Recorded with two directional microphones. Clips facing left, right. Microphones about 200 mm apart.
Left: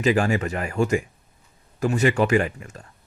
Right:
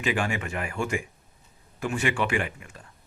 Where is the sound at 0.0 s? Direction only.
40° left (ahead or behind).